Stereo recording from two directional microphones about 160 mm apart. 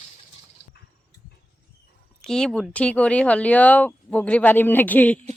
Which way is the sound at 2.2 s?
5° left (ahead or behind).